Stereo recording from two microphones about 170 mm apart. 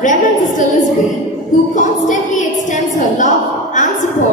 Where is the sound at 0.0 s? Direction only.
50° left (ahead or behind).